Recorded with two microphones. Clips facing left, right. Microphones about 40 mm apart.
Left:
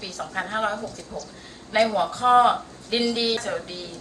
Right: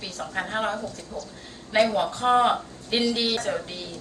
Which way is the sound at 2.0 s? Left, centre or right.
Right.